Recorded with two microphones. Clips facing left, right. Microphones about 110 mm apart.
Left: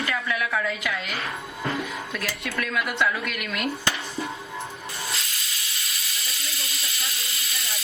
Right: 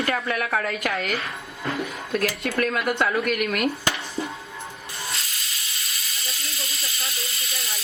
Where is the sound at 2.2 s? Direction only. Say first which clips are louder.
Right 8 dB; 50° right (ahead or behind).